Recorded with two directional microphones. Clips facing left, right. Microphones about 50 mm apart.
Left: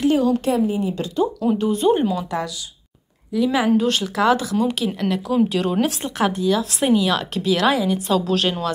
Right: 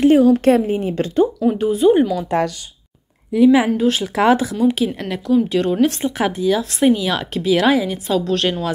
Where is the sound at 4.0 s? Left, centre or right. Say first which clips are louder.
Right 3 dB; right.